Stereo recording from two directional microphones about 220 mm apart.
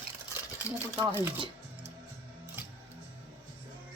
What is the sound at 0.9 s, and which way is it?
Speech, 10° right (ahead or behind).